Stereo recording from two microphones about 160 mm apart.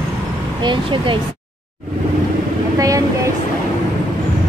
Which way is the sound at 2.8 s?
20° right (ahead or behind).